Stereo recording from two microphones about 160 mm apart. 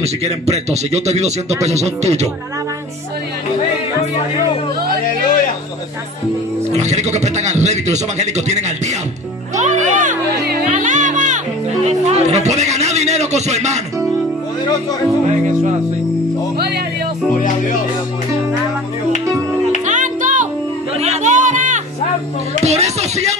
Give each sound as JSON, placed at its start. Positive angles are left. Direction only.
{"t": 0.0, "sound": "a man's voice", "side_deg": -40}
{"t": 6.8, "sound": "a man's voice", "side_deg": -45}
{"t": 15.2, "sound": "a man's voice", "side_deg": -45}
{"t": 16.5, "sound": "speech", "side_deg": -85}
{"t": 19.9, "sound": "music", "side_deg": -50}
{"t": 22.6, "sound": "speech", "side_deg": -45}